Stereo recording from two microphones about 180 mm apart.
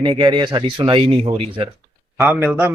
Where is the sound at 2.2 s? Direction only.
10° right (ahead or behind).